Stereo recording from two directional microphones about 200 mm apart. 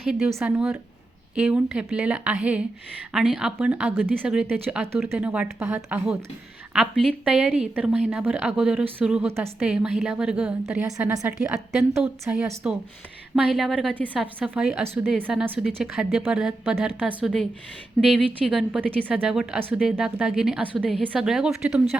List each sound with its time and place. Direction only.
0.0 s a woman's voice: centre (ahead or behind)
11.3 s a woman's voice: centre (ahead or behind)
18.4 s a woman's voice: centre (ahead or behind)